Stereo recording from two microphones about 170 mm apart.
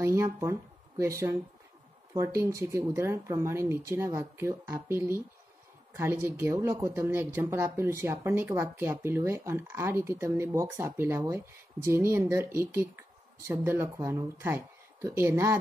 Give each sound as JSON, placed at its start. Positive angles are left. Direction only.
{"t": 0.0, "sound": "speech", "side_deg": -15}